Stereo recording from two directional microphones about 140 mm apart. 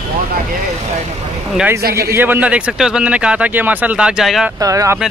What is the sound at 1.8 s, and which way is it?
Speech, 90° right.